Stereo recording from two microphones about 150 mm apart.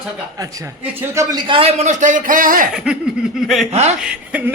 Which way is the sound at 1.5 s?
40° right (ahead or behind).